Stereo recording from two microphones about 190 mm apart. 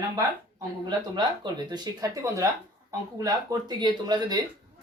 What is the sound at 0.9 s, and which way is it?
Speech, 25° right (ahead or behind).